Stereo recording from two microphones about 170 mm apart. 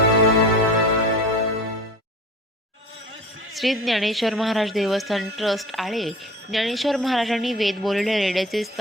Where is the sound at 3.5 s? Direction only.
Centre (ahead or behind).